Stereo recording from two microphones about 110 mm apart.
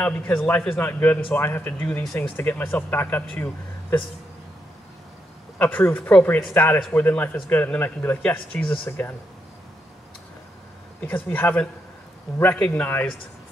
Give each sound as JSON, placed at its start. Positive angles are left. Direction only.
{"t": 0.0, "sound": "speech", "side_deg": 15}
{"t": 5.6, "sound": "speech", "side_deg": 20}
{"t": 11.0, "sound": "speech", "side_deg": 15}